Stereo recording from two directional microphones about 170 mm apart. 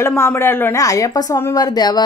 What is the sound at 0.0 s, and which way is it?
Speech, 15° left (ahead or behind).